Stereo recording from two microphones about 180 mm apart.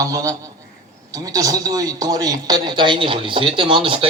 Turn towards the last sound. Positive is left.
turn(degrees=-30)  # may be behind; listen again after turning